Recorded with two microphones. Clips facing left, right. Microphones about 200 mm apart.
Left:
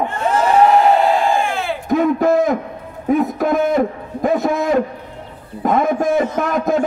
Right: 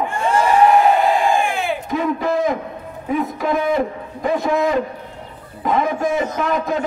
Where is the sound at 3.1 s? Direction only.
45° left (ahead or behind).